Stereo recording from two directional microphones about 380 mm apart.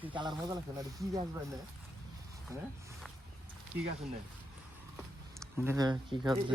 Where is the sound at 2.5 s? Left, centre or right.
Centre.